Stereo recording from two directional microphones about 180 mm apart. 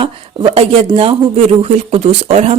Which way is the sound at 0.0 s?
30° right (ahead or behind).